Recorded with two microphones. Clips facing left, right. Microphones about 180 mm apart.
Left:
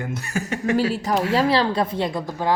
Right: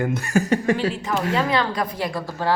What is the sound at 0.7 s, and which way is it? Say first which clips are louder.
A woman's voice: left 3 dB; 40° left (ahead or behind).